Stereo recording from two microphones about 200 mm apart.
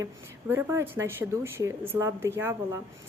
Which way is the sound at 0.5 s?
15° right (ahead or behind).